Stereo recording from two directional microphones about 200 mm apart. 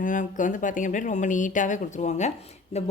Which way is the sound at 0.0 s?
40° left (ahead or behind).